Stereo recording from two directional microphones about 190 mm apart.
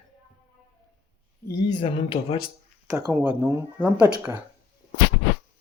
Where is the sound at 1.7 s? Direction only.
25° left (ahead or behind).